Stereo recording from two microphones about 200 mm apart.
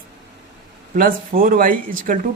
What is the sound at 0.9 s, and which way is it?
Speech, 45° right (ahead or behind).